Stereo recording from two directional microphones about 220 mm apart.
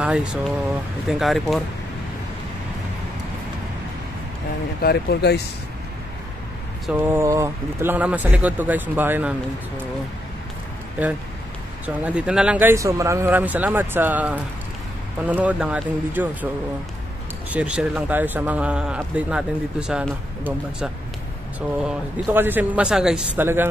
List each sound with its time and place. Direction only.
0.0 s speech: 5° right (ahead or behind)
4.8 s speech: 50° left (ahead or behind)
6.9 s speech: 10° right (ahead or behind)
11.8 s speech: 5° right (ahead or behind)
17.5 s speech: 5° right (ahead or behind)